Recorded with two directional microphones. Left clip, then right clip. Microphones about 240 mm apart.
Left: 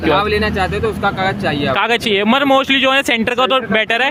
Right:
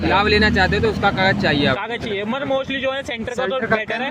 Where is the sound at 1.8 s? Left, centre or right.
Left.